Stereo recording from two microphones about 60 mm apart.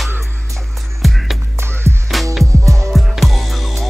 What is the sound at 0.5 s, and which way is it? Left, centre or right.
Music, centre.